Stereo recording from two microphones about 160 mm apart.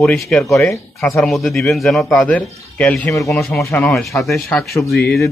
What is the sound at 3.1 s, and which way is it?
Speech, 20° left (ahead or behind).